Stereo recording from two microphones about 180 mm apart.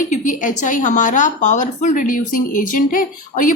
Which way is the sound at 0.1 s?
45° left (ahead or behind).